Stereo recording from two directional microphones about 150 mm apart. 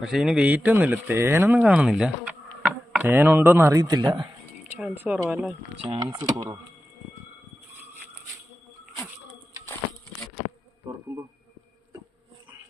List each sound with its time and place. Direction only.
0.0 s speech: 5° right (ahead or behind); by 4.3 s 25° right (ahead or behind)
4.6 s speech: 5° right (ahead or behind)
6.0 s speech: 25° right (ahead or behind)